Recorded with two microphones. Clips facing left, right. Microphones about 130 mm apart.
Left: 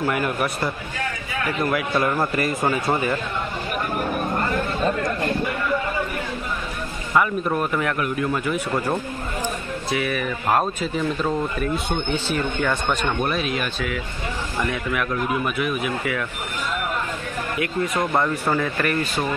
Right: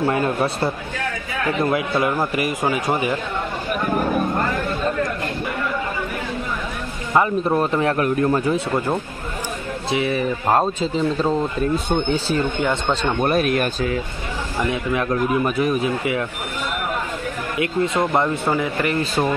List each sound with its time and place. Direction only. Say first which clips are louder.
0.0 s a man's voice: right 3 dB; 30° right (ahead or behind)
7.2 s speech: right 3 dB; 30° right (ahead or behind)
9.8 s speech: right 4 dB; 25° right (ahead or behind)
12.5 s speech: right 2 dB; 20° right (ahead or behind)
13.2 s speech: right 5 dB; 50° right (ahead or behind)
14.6 s speech: right 3 dB; 25° right (ahead or behind)
15.0 s speech: right 4 dB; 35° right (ahead or behind)
17.6 s speech: right 4 dB; 25° right (ahead or behind)